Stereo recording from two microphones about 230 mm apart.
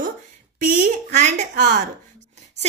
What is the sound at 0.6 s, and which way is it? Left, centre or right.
A woman's voice, right.